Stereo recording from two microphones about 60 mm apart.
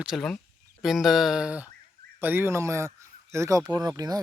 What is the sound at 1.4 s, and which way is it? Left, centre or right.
Speech, right.